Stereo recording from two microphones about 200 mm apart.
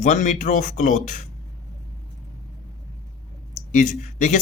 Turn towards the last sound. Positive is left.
turn(degrees=40)  # may be behind; listen again after turning